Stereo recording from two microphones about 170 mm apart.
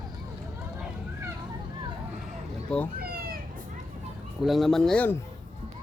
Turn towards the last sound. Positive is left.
turn(degrees=10)  # may be behind; listen again after turning